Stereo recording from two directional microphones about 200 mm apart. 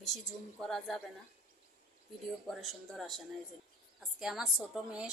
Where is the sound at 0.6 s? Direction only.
Centre (ahead or behind).